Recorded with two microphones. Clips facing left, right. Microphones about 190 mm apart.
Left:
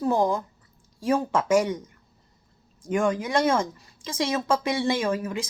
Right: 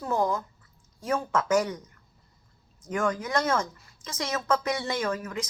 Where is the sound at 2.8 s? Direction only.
30° left (ahead or behind).